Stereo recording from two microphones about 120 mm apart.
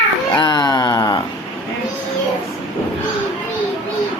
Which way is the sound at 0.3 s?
35° left (ahead or behind).